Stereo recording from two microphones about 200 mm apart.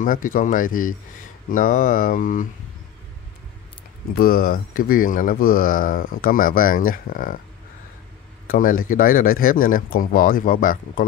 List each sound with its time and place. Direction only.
0.0 s speech: 40° left (ahead or behind)
1.5 s mantra: 40° left (ahead or behind)
4.1 s speech: 45° left (ahead or behind)
8.5 s speech: 45° left (ahead or behind)